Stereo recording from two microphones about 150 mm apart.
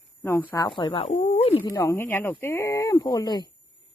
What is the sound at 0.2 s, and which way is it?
Speech, 15° left (ahead or behind).